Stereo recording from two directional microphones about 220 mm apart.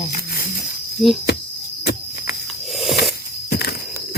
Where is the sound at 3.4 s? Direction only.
45° left (ahead or behind).